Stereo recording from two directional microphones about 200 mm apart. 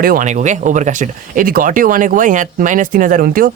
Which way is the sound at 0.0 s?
45° right (ahead or behind).